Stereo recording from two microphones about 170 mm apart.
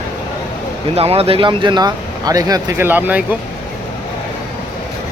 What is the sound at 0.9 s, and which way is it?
Speech, 35° right (ahead or behind).